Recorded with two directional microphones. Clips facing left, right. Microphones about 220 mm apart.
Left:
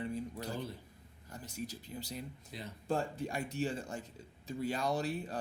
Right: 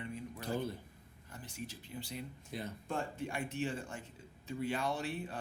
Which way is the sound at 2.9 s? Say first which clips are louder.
Left 5 dB; 40° left (ahead or behind).